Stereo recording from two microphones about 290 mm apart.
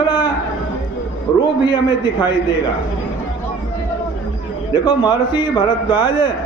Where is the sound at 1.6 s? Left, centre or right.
Centre.